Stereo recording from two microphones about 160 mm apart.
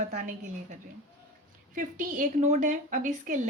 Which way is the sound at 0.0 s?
55° right (ahead or behind).